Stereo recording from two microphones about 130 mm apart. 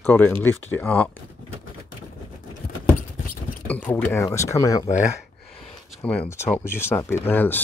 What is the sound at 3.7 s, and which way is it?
Speech, 15° left (ahead or behind).